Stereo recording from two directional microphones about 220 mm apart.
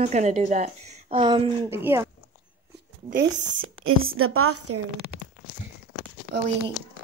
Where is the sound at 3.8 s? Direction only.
70° right (ahead or behind).